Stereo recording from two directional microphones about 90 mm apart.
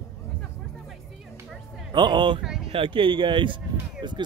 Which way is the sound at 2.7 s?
75° right (ahead or behind).